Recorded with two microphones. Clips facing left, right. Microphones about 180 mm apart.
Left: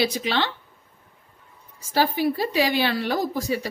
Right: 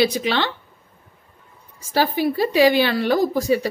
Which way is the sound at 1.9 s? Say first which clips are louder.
Right 3 dB; 75° right (ahead or behind).